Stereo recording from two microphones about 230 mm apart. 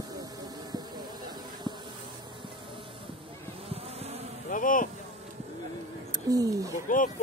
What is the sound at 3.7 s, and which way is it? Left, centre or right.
Bee, right.